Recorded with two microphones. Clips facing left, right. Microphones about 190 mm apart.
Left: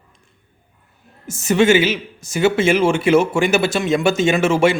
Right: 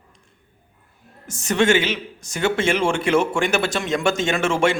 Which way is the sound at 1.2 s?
5° left (ahead or behind).